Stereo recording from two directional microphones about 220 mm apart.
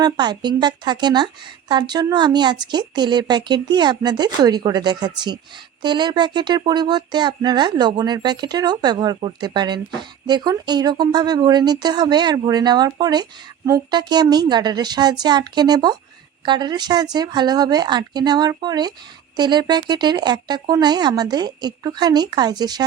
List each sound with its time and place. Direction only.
0.0 s speech: 20° right (ahead or behind)